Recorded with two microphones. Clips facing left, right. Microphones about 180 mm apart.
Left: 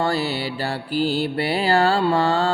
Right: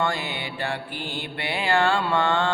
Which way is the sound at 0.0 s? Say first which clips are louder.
Left 5 dB; 35° left (ahead or behind).